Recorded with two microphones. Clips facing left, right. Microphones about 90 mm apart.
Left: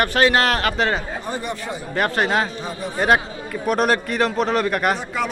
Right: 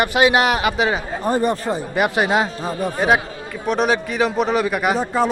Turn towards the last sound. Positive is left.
turn(degrees=-35)  # may be behind; listen again after turning